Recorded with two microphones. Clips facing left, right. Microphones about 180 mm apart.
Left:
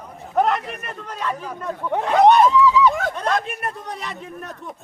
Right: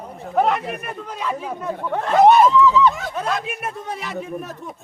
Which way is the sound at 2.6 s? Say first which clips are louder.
Right 1 dB; 10° left (ahead or behind).